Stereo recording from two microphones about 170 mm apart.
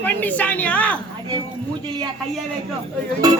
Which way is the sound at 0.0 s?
10° left (ahead or behind).